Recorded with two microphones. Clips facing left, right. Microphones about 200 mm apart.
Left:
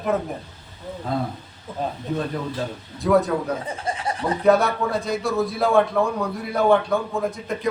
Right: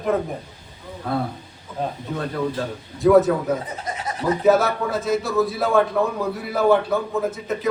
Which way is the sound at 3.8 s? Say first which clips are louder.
Left 3 dB; 30° left (ahead or behind).